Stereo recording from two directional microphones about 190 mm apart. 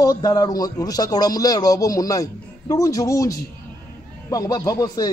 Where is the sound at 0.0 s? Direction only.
20° left (ahead or behind).